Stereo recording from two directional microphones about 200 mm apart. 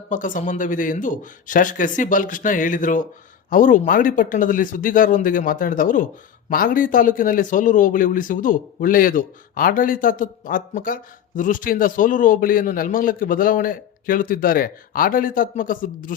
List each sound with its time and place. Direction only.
0.1 s speech: 40° left (ahead or behind)